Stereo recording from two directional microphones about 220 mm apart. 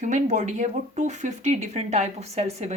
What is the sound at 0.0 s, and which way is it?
Speech, 35° right (ahead or behind).